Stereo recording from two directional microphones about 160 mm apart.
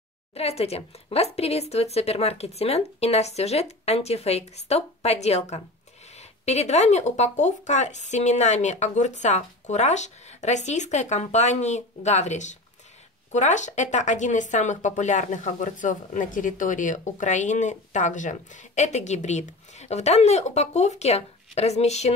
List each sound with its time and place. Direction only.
0.3 s speech: 40° left (ahead or behind)